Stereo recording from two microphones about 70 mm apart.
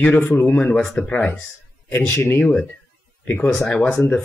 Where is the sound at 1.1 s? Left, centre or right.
Left.